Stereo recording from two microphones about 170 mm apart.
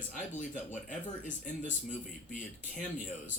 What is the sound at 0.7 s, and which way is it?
Speech, 45° left (ahead or behind).